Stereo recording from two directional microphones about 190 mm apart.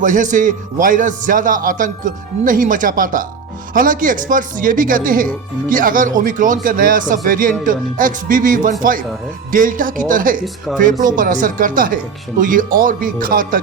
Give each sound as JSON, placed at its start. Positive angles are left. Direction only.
{"t": 0.0, "sound": "speech", "side_deg": -40}